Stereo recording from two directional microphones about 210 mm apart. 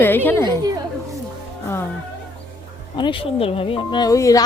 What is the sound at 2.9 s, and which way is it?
Speech, 25° left (ahead or behind).